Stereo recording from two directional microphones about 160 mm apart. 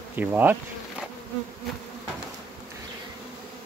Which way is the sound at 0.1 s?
10° right (ahead or behind).